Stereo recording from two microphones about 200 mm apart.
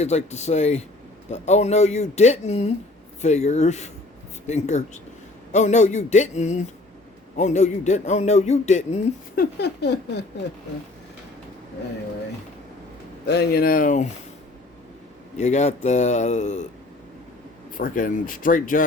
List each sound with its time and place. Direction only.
0.0 s a man's voice: 35° left (ahead or behind); by 10.0 s 55° left (ahead or behind)
13.2 s speech: 50° left (ahead or behind)
15.4 s a man's voice: 35° left (ahead or behind)
17.7 s speech: 45° left (ahead or behind)